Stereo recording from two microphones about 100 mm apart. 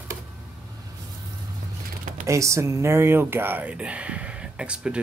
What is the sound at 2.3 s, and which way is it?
Speech, 30° right (ahead or behind).